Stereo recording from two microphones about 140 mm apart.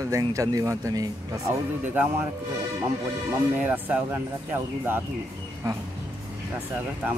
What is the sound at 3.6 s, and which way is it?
Speech, 10° right (ahead or behind).